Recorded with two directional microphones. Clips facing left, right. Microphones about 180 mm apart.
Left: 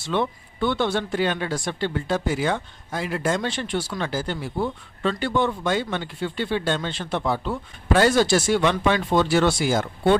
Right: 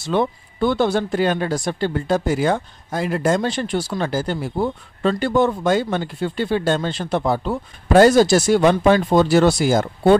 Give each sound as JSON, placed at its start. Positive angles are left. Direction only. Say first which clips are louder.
{"t": 0.0, "sound": "speech", "louder": "right 4 dB", "side_deg": -40}